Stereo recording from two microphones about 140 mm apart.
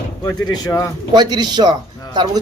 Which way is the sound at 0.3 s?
25° left (ahead or behind).